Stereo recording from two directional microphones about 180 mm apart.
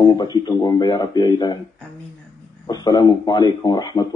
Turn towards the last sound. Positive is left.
turn(degrees=25)  # may be behind; listen again after turning